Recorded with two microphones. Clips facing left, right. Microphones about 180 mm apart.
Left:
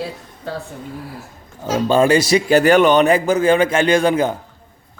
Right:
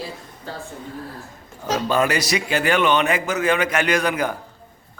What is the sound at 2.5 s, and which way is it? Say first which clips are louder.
A man's voice: left 7 dB; 40° left (ahead or behind).